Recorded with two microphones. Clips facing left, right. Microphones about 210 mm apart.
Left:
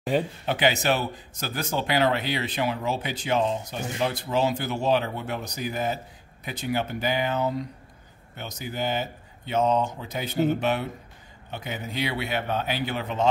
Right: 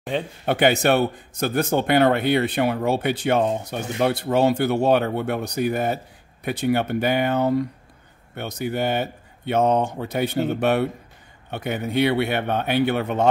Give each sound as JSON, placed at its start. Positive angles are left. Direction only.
{"t": 0.1, "sound": "speech", "side_deg": 5}
{"t": 0.5, "sound": "a man's voice", "side_deg": -55}